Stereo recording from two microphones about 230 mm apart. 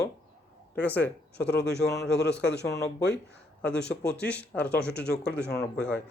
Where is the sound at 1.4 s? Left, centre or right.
Left.